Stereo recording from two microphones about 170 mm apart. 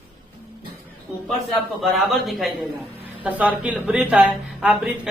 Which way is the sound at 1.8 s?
Centre (ahead or behind).